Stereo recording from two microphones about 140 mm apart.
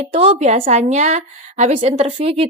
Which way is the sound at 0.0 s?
50° right (ahead or behind).